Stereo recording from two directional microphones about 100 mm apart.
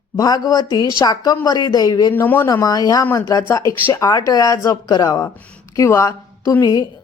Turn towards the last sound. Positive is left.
turn(degrees=35)  # may be behind; listen again after turning